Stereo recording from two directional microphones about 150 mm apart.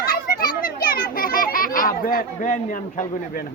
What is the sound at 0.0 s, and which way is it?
Children playing, 75° left (ahead or behind).